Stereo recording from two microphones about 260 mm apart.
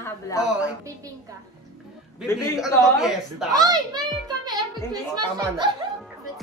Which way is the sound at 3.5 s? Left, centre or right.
Centre.